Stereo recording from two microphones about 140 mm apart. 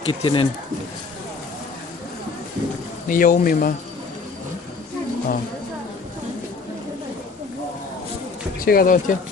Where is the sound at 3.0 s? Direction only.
80° left.